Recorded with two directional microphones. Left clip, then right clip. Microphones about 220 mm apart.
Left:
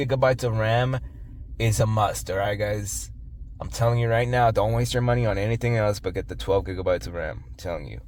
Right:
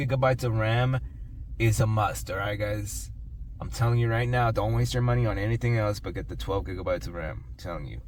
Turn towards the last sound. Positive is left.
turn(degrees=55)  # may be behind; listen again after turning